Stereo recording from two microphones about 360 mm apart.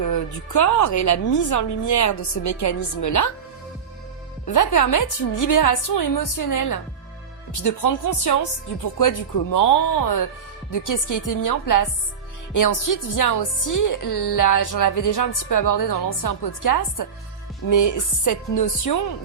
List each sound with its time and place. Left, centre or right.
0.5 s a woman's voice: left
4.5 s a woman's voice: left